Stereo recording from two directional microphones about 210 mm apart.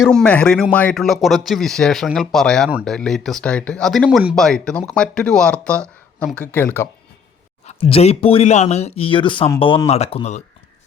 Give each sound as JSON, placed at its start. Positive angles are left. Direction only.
{"t": 0.0, "sound": "speech", "side_deg": 5}
{"t": 7.7, "sound": "speech", "side_deg": 25}